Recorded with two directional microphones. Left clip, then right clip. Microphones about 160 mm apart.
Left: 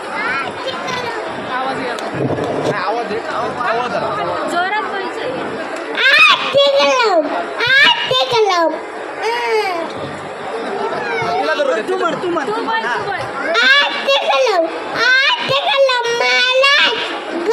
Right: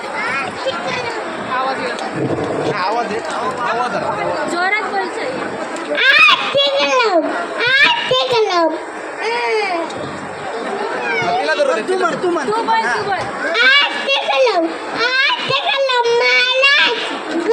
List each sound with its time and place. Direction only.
4.5 s chatter: 5° right (ahead or behind)
6.0 s a sound: 45° left (ahead or behind)
9.2 s babbling: 45° left (ahead or behind)
11.1 s chatter: centre (ahead or behind)
13.5 s children playing: 40° left (ahead or behind)